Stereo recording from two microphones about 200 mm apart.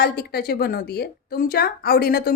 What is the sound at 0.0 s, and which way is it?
Speech, 50° left (ahead or behind).